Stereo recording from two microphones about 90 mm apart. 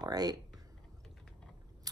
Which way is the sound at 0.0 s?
45° right (ahead or behind).